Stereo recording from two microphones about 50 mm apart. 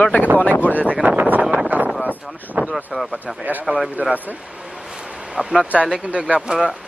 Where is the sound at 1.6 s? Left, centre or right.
Right.